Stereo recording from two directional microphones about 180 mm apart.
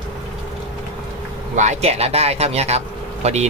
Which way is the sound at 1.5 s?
40° right (ahead or behind).